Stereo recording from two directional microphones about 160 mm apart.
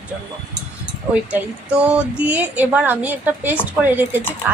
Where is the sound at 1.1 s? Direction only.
10° right (ahead or behind).